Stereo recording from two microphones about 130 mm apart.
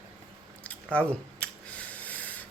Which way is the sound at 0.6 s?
10° left (ahead or behind).